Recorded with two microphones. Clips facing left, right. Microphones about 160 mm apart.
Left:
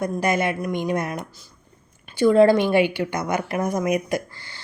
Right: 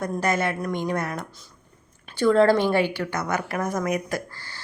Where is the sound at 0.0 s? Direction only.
15° left (ahead or behind).